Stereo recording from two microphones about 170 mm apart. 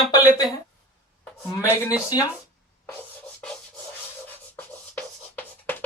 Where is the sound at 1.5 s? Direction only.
20° left (ahead or behind).